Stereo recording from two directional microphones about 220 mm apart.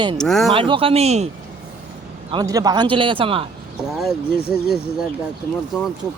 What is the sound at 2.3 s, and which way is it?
Speech, 15° right (ahead or behind).